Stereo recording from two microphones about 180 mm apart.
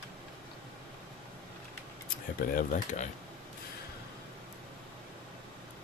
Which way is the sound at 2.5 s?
45° left (ahead or behind).